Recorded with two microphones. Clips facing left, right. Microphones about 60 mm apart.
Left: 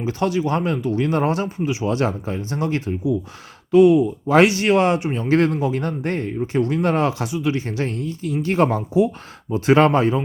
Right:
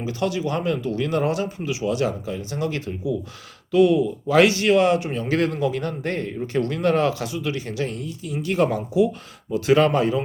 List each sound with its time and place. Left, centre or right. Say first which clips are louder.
0.0 s speech: left 3 dB; left